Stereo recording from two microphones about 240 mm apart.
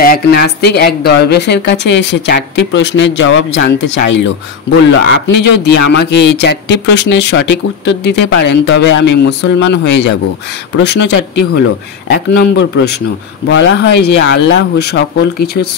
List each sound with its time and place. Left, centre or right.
0.0 s a man's voice: left